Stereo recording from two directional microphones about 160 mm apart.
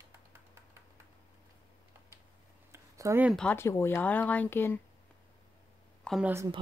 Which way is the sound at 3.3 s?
10° left (ahead or behind).